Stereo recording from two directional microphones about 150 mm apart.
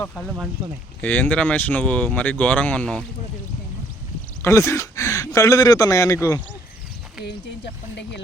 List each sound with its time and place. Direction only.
0.0 s speech: 10° left (ahead or behind)
0.3 s speech: 5° right (ahead or behind)
1.0 s speech: 10° left (ahead or behind)
4.4 s speech: 20° left (ahead or behind)